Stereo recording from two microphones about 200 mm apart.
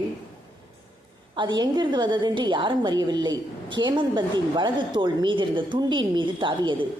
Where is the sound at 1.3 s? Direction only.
25° right (ahead or behind).